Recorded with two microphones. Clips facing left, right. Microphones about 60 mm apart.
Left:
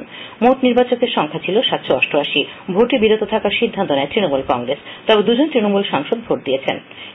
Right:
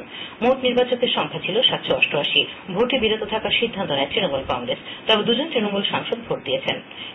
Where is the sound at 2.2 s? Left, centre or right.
Left.